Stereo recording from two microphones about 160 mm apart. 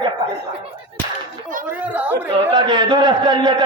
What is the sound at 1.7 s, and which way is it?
Speech, 10° right (ahead or behind).